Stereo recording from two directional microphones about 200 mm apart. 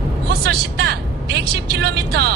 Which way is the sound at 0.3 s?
50° right (ahead or behind).